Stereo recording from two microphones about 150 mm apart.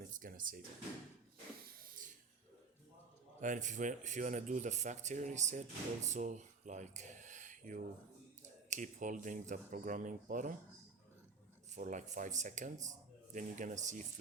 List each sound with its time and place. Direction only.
0.1 s drawer open or close: 65° right (ahead or behind)
3.4 s speech: 55° right (ahead or behind)
11.7 s speech: 55° right (ahead or behind)